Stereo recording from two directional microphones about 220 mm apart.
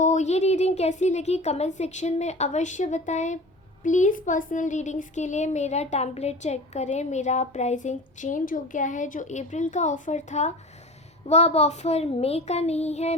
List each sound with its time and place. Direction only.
0.0 s a child's voice: 35° left (ahead or behind)